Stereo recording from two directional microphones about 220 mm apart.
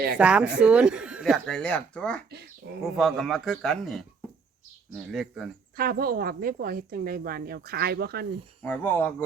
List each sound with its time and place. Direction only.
0.2 s speech: 5° right (ahead or behind)
5.7 s speech: 40° right (ahead or behind)
8.6 s speech: 10° left (ahead or behind)